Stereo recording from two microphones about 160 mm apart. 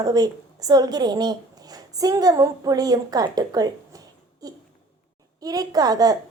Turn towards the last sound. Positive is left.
turn(degrees=-25)  # may be behind; listen again after turning